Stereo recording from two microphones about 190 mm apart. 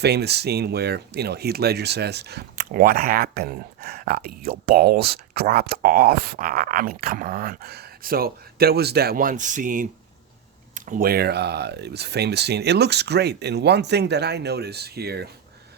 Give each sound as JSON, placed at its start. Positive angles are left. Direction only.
{"t": 0.0, "sound": "speech", "side_deg": -60}